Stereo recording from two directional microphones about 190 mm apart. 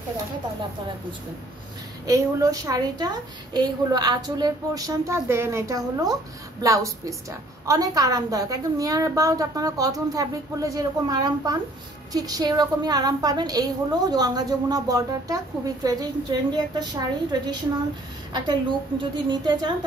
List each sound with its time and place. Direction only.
2.0 s a woman's voice: 20° right (ahead or behind)